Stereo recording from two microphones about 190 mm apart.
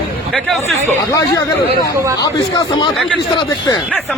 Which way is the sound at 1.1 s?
20° left (ahead or behind).